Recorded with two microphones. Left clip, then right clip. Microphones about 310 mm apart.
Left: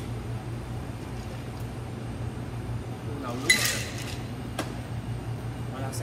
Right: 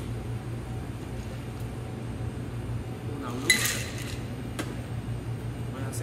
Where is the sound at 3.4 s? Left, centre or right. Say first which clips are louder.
Left 1 dB; centre.